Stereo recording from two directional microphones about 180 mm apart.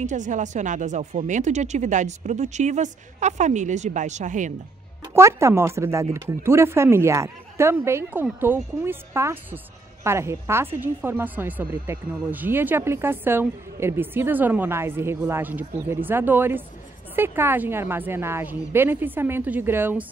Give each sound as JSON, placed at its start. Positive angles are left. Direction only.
{"t": 0.0, "sound": "speech", "side_deg": -45}
{"t": 5.1, "sound": "speech", "side_deg": -15}